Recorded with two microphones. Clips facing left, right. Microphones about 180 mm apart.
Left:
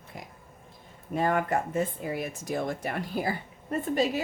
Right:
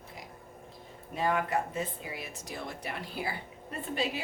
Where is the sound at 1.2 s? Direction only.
50° left (ahead or behind).